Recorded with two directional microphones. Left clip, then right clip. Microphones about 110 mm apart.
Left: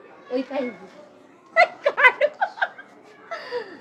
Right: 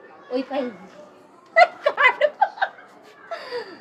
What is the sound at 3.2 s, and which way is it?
Chuckle, 75° right (ahead or behind).